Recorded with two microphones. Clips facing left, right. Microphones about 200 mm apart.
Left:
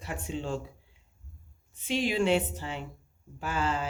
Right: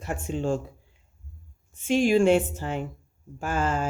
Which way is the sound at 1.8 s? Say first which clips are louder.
Right 8 dB; 50° right (ahead or behind).